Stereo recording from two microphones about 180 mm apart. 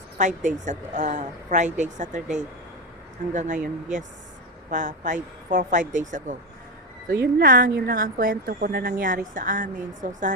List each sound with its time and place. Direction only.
0.2 s a woman's voice: 40° right (ahead or behind)
7.1 s speech: 60° right (ahead or behind)